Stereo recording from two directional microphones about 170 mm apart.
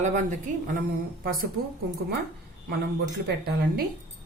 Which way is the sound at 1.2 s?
55° right (ahead or behind).